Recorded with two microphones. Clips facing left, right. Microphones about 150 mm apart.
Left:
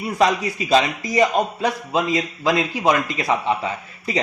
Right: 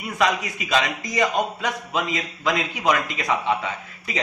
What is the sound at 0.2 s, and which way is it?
A man's voice, 35° left (ahead or behind).